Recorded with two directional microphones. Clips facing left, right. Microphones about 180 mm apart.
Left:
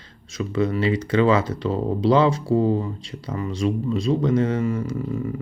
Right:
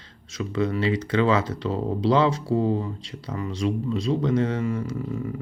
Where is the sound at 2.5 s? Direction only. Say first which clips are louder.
Left 3 dB; 50° left (ahead or behind).